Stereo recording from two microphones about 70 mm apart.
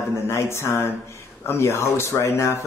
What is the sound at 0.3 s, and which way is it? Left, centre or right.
Speech, left.